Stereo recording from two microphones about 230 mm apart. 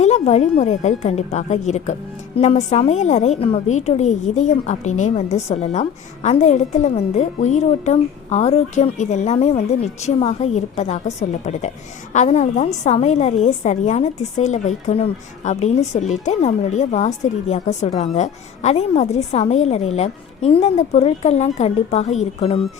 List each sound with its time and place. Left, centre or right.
0.0 s a woman's voice: left
12.1 s a woman's voice: left